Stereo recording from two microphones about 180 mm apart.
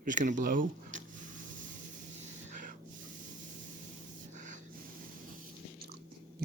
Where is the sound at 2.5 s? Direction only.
45° right (ahead or behind).